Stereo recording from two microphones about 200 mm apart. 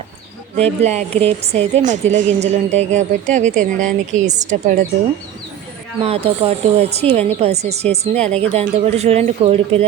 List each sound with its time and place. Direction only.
0.5 s speech: 30° right (ahead or behind)
6.0 s speech: 30° right (ahead or behind)